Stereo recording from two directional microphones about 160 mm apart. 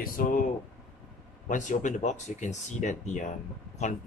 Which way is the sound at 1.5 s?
50° left (ahead or behind).